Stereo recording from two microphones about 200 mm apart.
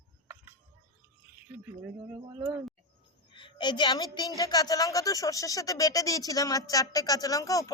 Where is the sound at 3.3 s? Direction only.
25° left (ahead or behind).